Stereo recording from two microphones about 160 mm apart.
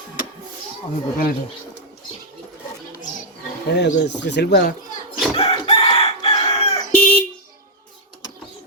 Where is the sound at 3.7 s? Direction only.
90° left.